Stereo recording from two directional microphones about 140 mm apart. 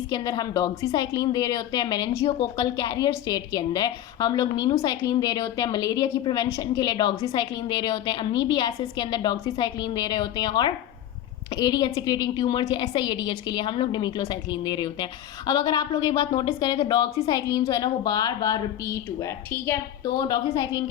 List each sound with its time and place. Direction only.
0.1 s a woman's voice: 25° left (ahead or behind)
20.1 s a woman's voice: 30° left (ahead or behind)